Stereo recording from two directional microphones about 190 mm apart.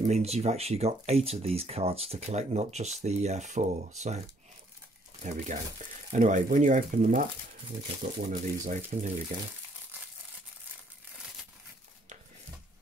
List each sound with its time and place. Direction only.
0.0 s speech: 35° right (ahead or behind)
5.2 s speech: 40° right (ahead or behind)
8.3 s speech: 40° right (ahead or behind)